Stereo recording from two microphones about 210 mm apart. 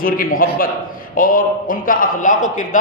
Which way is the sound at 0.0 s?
40° left (ahead or behind).